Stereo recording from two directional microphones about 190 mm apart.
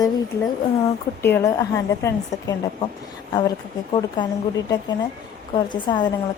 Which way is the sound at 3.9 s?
25° left (ahead or behind).